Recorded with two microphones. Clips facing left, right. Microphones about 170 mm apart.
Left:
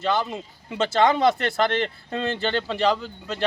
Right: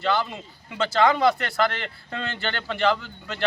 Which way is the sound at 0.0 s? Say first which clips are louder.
Left 1 dB; 20° left (ahead or behind).